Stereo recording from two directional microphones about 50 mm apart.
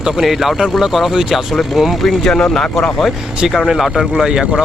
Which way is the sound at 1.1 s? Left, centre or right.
Centre.